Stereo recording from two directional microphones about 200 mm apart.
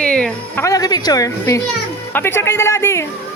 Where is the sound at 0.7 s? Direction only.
20° left (ahead or behind).